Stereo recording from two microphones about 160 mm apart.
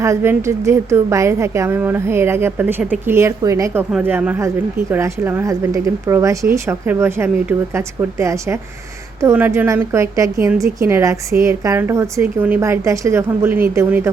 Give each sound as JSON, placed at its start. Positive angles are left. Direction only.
{"t": 0.0, "sound": "a woman's voice", "side_deg": -15}